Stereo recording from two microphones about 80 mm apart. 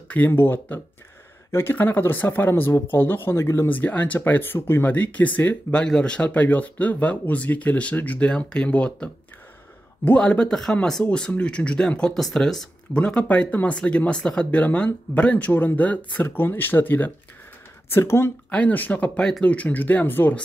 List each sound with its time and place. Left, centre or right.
0.1 s speech: left
3.7 s speech: left; by 13.0 s centre
13.0 s speech: centre; by 18.3 s left
18.5 s speech: centre
19.1 s speech: centre